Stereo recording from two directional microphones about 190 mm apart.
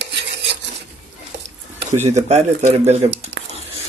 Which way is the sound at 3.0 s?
20° right (ahead or behind).